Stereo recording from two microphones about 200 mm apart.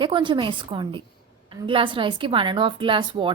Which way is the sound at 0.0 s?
25° right (ahead or behind).